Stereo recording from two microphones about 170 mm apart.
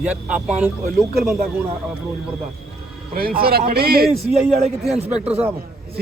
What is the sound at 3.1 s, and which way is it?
Speech, 60° right (ahead or behind).